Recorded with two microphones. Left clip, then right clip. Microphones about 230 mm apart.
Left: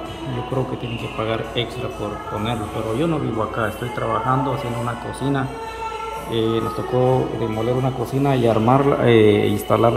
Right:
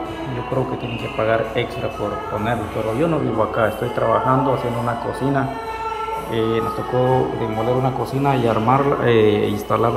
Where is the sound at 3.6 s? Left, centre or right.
Left.